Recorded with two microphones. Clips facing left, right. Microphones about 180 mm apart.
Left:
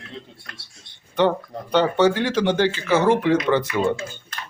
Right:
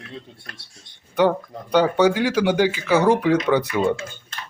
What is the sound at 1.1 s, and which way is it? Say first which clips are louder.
Speech: right 1 dB; 10° right (ahead or behind).